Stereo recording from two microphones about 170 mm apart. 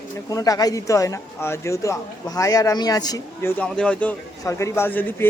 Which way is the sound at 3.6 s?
5° left (ahead or behind).